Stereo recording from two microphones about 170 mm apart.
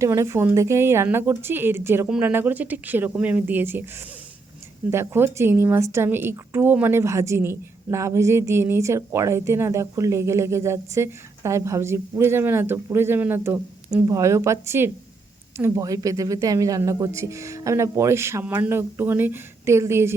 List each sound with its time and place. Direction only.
0.0 s a woman's voice: 15° right (ahead or behind)